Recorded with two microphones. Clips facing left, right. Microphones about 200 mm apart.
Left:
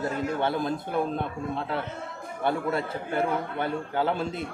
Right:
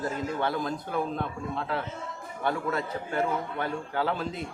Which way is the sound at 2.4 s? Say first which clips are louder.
Left 2 dB; 25° left (ahead or behind).